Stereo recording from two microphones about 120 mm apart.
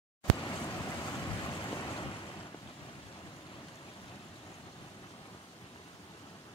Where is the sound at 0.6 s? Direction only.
30° left (ahead or behind).